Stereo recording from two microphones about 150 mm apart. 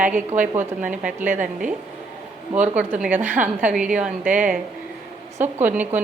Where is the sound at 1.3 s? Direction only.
60° right (ahead or behind).